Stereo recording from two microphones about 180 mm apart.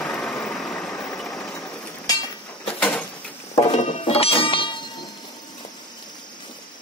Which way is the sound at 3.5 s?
35° left (ahead or behind).